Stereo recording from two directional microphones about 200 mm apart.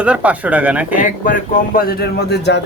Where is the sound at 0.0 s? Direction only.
5° right (ahead or behind).